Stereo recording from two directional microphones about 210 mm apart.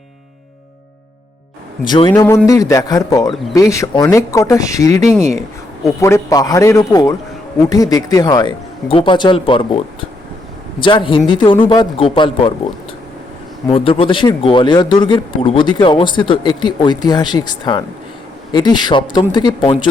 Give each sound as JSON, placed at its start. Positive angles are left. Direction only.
{"t": 1.9, "sound": "speech", "side_deg": 20}
{"t": 13.7, "sound": "speech", "side_deg": 25}